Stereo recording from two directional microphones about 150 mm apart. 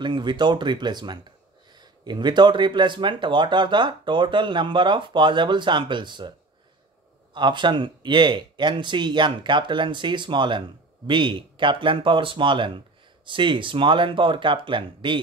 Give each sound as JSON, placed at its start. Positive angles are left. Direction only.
{"t": 0.0, "sound": "speech", "side_deg": -30}
{"t": 7.3, "sound": "speech", "side_deg": -30}